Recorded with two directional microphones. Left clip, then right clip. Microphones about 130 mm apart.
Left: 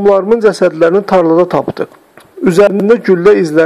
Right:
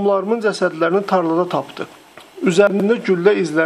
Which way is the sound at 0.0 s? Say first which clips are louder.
Left 8 dB; 30° left (ahead or behind).